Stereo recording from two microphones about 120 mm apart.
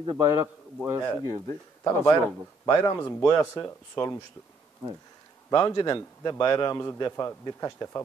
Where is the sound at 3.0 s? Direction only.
10° left (ahead or behind).